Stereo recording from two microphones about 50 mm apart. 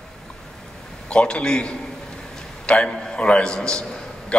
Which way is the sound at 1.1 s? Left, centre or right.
Left.